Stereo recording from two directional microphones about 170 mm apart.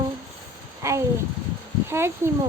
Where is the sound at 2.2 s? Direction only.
15° right (ahead or behind).